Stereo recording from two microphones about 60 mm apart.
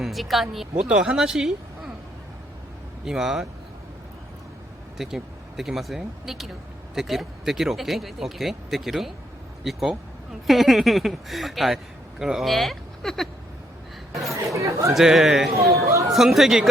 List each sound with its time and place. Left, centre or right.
0.0 s speech: centre
0.9 s speech: centre
1.1 s a woman's voice: centre
3.0 s speech: centre
4.9 s speech: centre
12.5 s speech: centre
14.5 s speech: right
14.9 s speech: centre
15.5 s speech: right
16.0 s speech: centre